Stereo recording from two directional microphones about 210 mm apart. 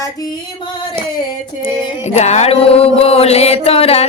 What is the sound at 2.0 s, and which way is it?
Mantra, 30° left (ahead or behind).